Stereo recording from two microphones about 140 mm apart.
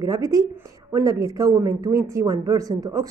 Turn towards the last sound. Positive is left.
turn(degrees=-25)  # may be behind; listen again after turning